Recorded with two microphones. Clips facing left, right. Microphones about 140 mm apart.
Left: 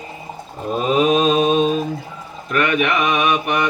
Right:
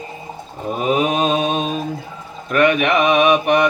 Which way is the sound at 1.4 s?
35° left (ahead or behind).